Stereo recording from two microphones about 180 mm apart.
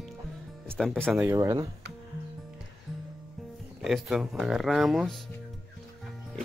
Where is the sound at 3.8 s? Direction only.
Centre (ahead or behind).